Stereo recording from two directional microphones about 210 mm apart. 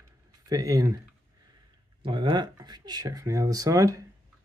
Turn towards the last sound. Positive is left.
turn(degrees=-15)  # may be behind; listen again after turning